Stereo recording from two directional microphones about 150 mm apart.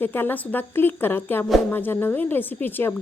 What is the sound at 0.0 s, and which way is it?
Speech, 15° left (ahead or behind).